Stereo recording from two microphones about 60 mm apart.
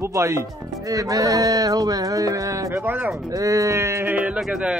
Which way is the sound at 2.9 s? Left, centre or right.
Right.